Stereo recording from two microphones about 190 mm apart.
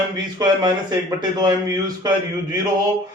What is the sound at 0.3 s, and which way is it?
A man's voice, 20° right (ahead or behind).